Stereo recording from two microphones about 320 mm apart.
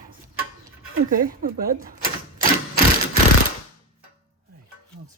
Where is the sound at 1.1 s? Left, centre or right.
Right.